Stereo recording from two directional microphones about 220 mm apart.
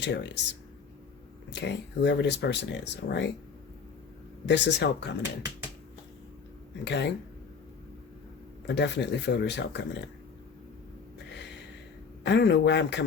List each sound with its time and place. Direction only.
0.0 s speech: 50° left (ahead or behind)
1.5 s speech: 50° left (ahead or behind)
4.4 s speech: 55° left (ahead or behind)
6.8 s speech: 50° left (ahead or behind)
8.6 s speech: 50° left (ahead or behind)
12.2 s speech: 50° left (ahead or behind)